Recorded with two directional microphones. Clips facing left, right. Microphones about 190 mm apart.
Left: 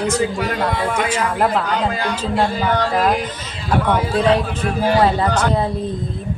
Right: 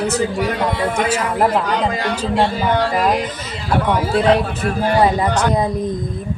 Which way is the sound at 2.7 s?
10° right (ahead or behind).